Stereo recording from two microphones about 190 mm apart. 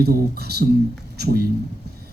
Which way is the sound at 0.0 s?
55° right (ahead or behind).